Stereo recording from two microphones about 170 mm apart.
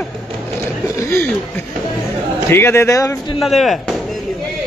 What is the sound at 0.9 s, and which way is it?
A man's voice, 15° left (ahead or behind).